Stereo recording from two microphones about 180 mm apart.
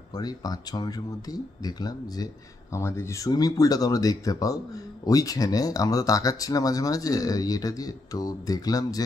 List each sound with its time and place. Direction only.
0.1 s speech: 20° left (ahead or behind)